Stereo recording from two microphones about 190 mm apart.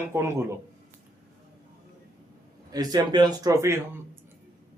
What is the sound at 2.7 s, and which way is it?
Speech, 20° right (ahead or behind).